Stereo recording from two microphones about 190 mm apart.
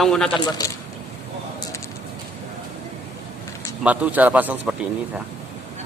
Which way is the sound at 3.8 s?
5° right (ahead or behind).